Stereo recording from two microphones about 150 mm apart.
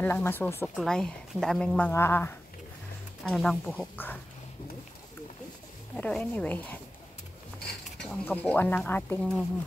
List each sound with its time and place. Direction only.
0.0 s speech: 15° left (ahead or behind)
0.7 s speech: 5° left (ahead or behind)
1.9 s speech: 15° left (ahead or behind)
3.3 s speech: centre (ahead or behind)
5.9 s speech: 10° left (ahead or behind)
8.0 s speech: 10° left (ahead or behind)